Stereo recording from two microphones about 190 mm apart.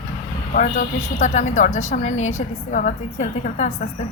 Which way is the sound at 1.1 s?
40° left (ahead or behind).